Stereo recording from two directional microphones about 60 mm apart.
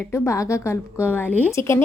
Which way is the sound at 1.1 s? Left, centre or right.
Left.